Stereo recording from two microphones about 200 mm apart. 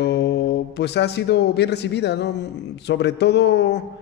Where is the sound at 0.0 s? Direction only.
60° left (ahead or behind).